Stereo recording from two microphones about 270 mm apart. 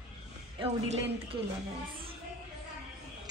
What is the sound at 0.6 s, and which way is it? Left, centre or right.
Speech, centre.